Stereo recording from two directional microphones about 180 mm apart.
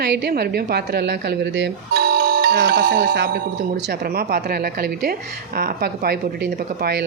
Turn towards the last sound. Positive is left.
turn(degrees=-65)  # may be behind; listen again after turning